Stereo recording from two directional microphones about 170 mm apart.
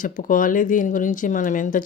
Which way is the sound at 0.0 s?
50° left (ahead or behind).